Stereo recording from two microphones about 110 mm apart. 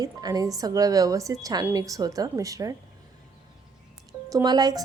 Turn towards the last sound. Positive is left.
turn(degrees=-35)  # may be behind; listen again after turning